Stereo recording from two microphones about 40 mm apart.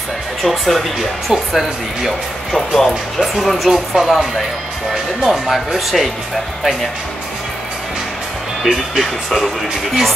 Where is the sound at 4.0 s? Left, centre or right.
Centre.